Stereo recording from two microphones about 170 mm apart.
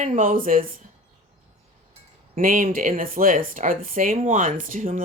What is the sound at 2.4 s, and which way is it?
Speech, 55° right (ahead or behind).